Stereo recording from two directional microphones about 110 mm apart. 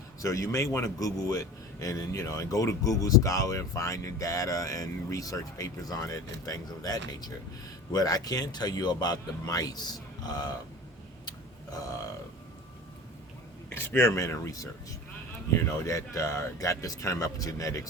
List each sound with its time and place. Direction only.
0.2 s a man's voice: 30° left (ahead or behind)
11.3 s a sound: 35° left (ahead or behind)
13.7 s speech: 20° left (ahead or behind)